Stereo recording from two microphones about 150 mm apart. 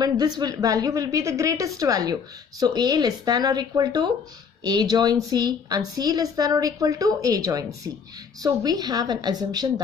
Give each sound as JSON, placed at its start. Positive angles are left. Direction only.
{"t": 0.0, "sound": "a woman's voice", "side_deg": -25}